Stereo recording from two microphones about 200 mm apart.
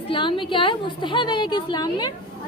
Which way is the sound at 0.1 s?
25° left (ahead or behind).